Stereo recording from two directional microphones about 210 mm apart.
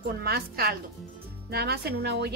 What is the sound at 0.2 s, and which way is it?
A woman's voice, 45° right (ahead or behind).